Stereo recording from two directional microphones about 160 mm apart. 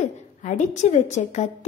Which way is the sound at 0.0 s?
50° left (ahead or behind).